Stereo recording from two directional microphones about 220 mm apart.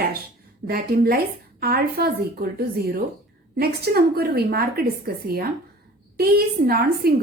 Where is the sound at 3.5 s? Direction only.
45° right (ahead or behind).